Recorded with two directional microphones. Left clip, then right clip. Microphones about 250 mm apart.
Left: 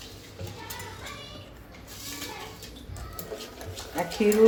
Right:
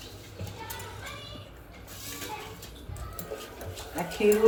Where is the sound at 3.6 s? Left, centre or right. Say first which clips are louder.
Left 1 dB; centre.